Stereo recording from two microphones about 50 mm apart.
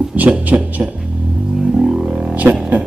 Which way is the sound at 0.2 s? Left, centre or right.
Right.